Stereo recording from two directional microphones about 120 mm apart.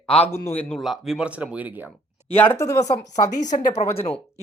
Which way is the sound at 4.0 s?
55° left (ahead or behind).